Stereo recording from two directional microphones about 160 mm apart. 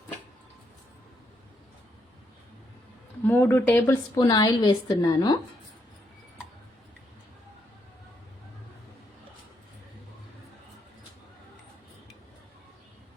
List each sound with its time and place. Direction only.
3.2 s a woman's voice: 15° left (ahead or behind)